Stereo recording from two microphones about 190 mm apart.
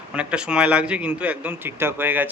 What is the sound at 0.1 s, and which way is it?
A man's voice, 5° right (ahead or behind).